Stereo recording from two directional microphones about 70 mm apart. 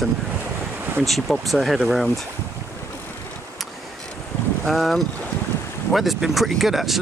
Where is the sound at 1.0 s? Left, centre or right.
Centre.